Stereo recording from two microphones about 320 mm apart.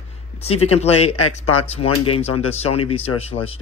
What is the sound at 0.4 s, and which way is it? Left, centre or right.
Speech, centre.